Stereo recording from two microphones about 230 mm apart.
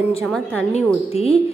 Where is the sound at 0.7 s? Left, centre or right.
Left.